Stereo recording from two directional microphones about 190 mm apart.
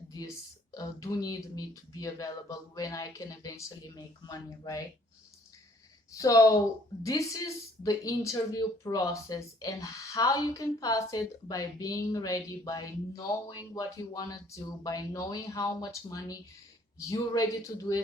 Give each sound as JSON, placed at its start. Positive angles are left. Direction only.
{"t": 0.1, "sound": "speech", "side_deg": 20}
{"t": 6.1, "sound": "speech", "side_deg": 20}